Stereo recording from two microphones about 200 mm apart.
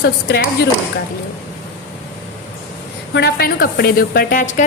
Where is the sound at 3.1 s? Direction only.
50° left (ahead or behind).